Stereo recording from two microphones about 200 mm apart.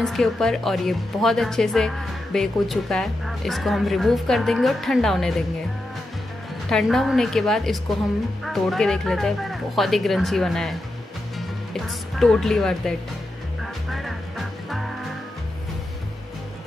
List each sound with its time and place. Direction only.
0.0 s speech: centre (ahead or behind)
6.7 s speech: centre (ahead or behind)
13.8 s music: centre (ahead or behind)